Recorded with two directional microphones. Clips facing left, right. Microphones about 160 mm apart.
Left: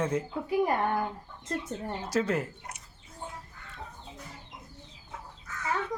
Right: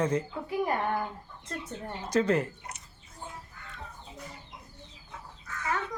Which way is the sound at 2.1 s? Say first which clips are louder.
Right 3 dB; 5° left (ahead or behind).